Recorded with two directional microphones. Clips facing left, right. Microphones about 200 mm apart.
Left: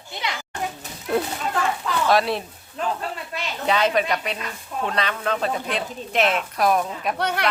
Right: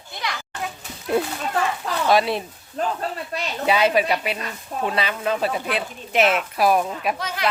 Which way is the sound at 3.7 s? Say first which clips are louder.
Right 2 dB; 10° right (ahead or behind).